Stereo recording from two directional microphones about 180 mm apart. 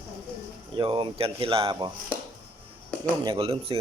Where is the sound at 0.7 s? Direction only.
25° right (ahead or behind).